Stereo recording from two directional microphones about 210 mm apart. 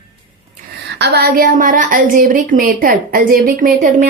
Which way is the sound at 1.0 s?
50° right (ahead or behind).